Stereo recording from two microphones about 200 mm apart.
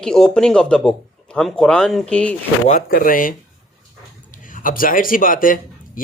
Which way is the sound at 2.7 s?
45° left (ahead or behind).